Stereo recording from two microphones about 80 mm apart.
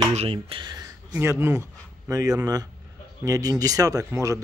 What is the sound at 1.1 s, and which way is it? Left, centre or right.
Speech, right.